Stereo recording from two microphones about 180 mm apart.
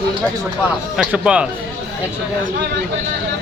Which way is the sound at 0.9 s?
5° right (ahead or behind).